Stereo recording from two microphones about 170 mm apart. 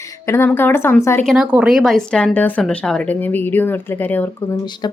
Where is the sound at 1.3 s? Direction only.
5° right (ahead or behind); by 4.2 s 10° left (ahead or behind).